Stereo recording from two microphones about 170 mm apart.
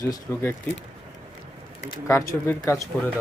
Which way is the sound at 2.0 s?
15° left (ahead or behind).